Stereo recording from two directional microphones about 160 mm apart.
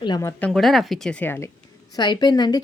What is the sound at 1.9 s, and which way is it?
Speech, 25° left (ahead or behind).